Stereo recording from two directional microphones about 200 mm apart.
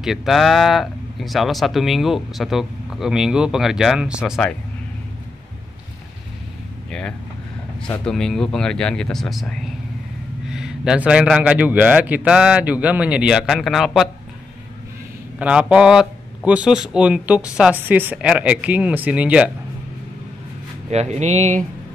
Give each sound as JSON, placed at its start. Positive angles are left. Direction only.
{"t": 0.0, "sound": "speech", "side_deg": 0}
{"t": 6.9, "sound": "speech", "side_deg": 5}
{"t": 15.3, "sound": "speech", "side_deg": -5}
{"t": 20.9, "sound": "speech", "side_deg": -35}